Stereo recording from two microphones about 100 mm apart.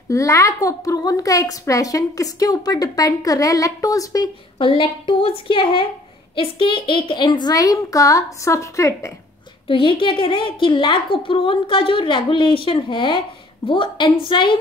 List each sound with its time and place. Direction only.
0.1 s a woman's voice: 30° left (ahead or behind)
4.6 s a woman's voice: 60° left (ahead or behind); by 9.1 s 30° left (ahead or behind)
9.7 s a woman's voice: 60° left (ahead or behind)